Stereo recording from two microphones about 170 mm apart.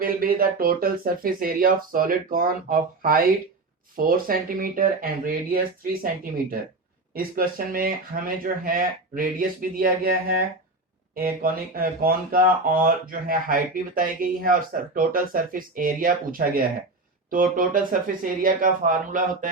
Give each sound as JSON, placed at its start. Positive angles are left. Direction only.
{"t": 0.0, "sound": "speech", "side_deg": -60}
{"t": 7.1, "sound": "speech", "side_deg": -60}